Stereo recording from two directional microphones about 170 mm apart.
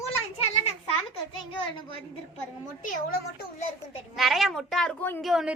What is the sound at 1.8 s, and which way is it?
Speech, 30° left (ahead or behind).